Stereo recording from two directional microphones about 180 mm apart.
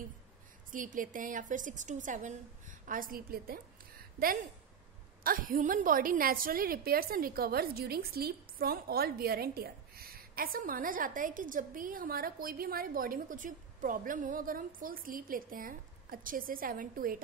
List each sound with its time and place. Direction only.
0.7 s a woman's voice: 45° right (ahead or behind)
5.2 s a woman's voice: 50° right (ahead or behind)